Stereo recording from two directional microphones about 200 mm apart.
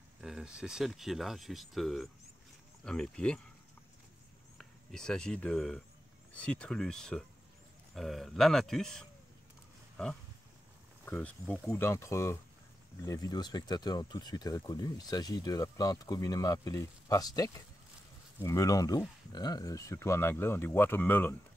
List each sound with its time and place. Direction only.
0.2 s speech: 5° right (ahead or behind)
4.6 s speech: 5° left (ahead or behind)
11.1 s speech: 5° left (ahead or behind)